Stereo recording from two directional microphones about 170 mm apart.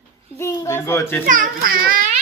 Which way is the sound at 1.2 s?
55° right (ahead or behind).